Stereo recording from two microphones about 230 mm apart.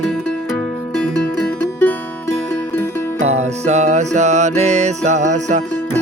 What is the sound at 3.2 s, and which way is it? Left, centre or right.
Music, right.